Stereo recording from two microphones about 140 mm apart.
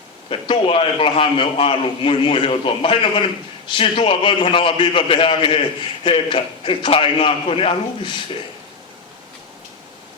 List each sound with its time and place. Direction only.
0.3 s a man's voice: 40° left (ahead or behind)